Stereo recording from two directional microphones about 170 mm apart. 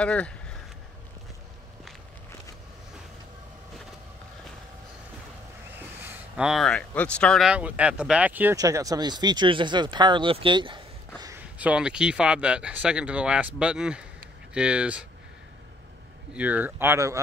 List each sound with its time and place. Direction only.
0.0 s speech: 5° left (ahead or behind)
6.0 s speech: 10° right (ahead or behind); by 11.3 s 25° right (ahead or behind)
11.5 s speech: 5° right (ahead or behind)
16.3 s speech: 10° right (ahead or behind)